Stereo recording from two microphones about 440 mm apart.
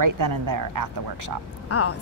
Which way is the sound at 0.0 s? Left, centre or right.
Right.